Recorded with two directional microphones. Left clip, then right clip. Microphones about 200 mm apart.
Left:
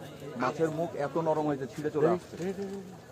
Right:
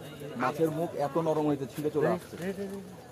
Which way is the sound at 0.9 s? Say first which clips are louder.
Right 1 dB; 20° right (ahead or behind).